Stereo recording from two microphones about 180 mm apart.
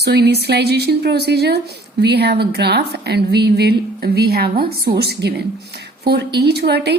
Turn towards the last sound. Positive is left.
turn(degrees=-65)  # may be behind; listen again after turning